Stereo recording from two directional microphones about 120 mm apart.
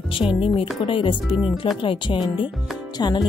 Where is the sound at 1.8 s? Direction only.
45° left (ahead or behind).